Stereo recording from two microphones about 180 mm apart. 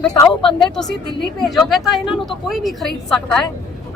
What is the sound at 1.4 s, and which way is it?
Speech, centre (ahead or behind).